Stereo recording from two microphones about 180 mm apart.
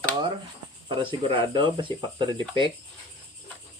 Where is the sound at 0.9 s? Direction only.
25° right (ahead or behind).